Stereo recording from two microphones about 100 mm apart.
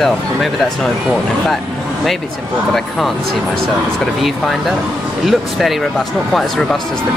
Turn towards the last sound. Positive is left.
turn(degrees=0)  # may be behind; listen again after turning